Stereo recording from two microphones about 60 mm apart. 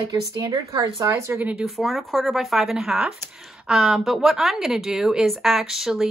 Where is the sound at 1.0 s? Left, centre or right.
Right.